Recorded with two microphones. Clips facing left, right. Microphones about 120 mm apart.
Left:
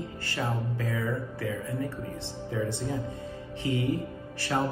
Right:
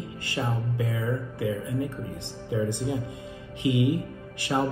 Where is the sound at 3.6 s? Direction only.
15° right (ahead or behind).